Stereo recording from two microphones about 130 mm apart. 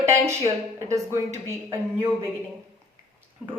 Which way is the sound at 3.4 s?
10° right (ahead or behind).